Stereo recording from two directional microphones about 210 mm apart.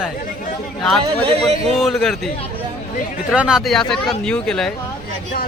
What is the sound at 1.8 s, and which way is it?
Speech, centre (ahead or behind).